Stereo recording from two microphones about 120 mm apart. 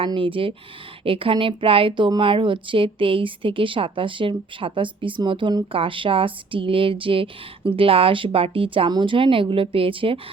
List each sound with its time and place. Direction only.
0.0 s speech: 45° right (ahead or behind)